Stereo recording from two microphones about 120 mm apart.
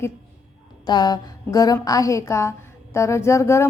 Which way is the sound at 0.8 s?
35° left (ahead or behind).